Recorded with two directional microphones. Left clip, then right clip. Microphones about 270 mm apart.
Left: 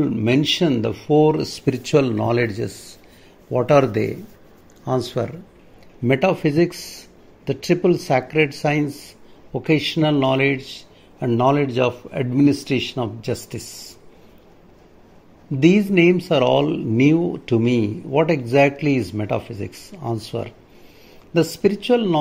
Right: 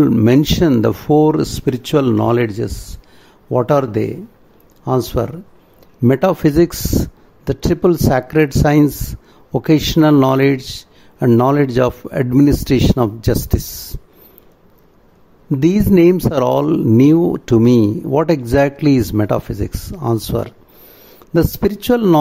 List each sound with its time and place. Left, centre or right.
0.0 s speech: right
16.0 s speech: right